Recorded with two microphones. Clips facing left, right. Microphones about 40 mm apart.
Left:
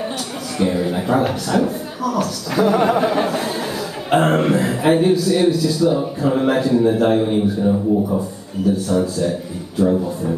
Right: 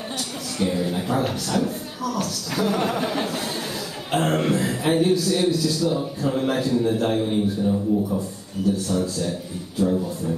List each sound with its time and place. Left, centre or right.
0.6 s a man's voice: centre
9.8 s speech: left